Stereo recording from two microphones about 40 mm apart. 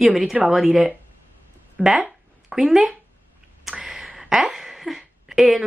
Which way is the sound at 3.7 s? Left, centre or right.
Centre.